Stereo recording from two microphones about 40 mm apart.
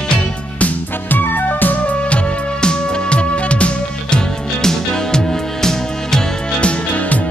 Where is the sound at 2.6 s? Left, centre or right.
Left.